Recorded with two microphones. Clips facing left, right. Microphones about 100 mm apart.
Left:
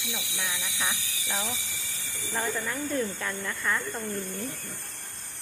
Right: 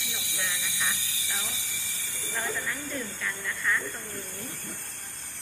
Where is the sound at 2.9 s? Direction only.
40° left (ahead or behind).